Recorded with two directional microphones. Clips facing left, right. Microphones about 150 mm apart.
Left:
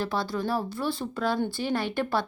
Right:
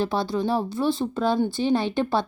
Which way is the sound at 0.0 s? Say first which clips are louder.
Right 5 dB; 25° right (ahead or behind).